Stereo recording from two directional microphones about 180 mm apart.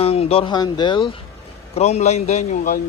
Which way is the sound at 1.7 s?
35° left (ahead or behind).